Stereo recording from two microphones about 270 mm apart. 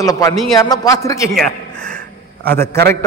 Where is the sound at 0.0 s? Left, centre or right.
Centre.